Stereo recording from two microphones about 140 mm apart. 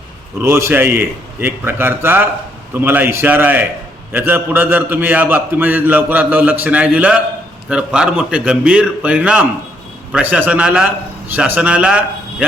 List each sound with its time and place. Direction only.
0.4 s a man's voice: 20° right (ahead or behind)